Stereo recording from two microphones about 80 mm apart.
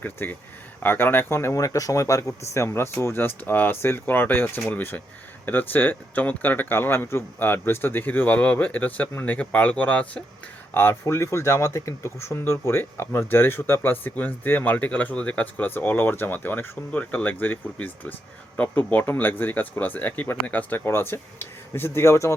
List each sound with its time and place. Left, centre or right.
0.0 s speech: left
1.5 s speech: left; by 10.2 s centre
11.0 s speech: left